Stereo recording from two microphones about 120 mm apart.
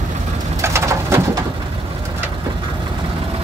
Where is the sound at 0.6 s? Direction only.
25° right (ahead or behind).